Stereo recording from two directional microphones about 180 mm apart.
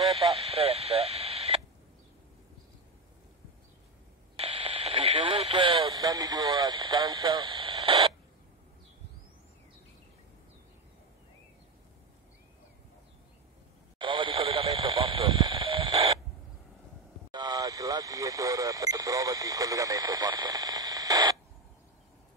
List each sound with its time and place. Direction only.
0.1 s radio: 35° right (ahead or behind)
4.4 s radio: 30° right (ahead or behind)
13.9 s radio: 25° right (ahead or behind)
17.3 s radio: 25° right (ahead or behind)